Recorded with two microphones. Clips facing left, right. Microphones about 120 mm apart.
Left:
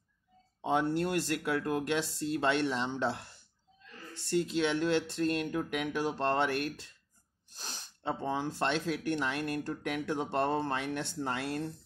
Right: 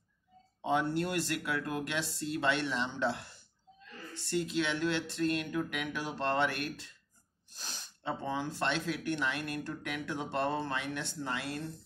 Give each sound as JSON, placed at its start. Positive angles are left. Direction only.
{"t": 0.6, "sound": "speech", "side_deg": 35}
{"t": 4.3, "sound": "speech", "side_deg": 40}